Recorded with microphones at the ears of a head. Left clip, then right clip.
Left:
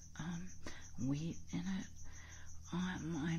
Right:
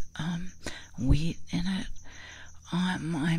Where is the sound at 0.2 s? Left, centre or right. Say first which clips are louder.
Right 12 dB; right.